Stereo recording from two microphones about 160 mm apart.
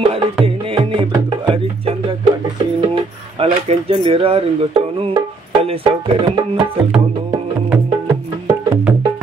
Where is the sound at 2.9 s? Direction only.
35° right (ahead or behind).